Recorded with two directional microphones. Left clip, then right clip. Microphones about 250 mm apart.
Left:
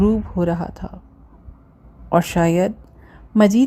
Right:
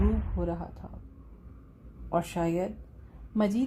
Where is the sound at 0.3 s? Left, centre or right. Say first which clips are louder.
Left 12 dB; left.